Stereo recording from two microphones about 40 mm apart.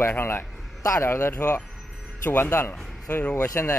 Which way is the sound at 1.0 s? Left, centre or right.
Left.